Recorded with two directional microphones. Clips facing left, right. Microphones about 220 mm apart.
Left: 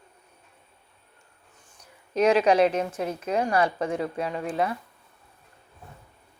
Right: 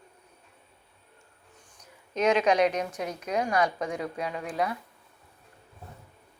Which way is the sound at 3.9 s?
5° left (ahead or behind).